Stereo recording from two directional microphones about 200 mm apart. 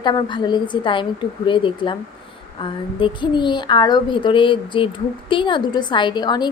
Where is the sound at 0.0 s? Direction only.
25° left (ahead or behind).